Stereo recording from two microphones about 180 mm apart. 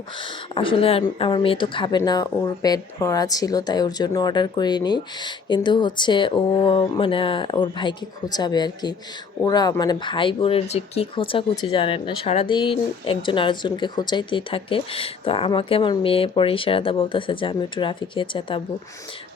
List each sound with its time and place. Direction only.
0.2 s speech: 30° left (ahead or behind)